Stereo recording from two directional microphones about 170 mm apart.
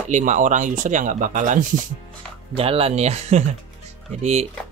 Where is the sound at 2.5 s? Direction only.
35° right (ahead or behind).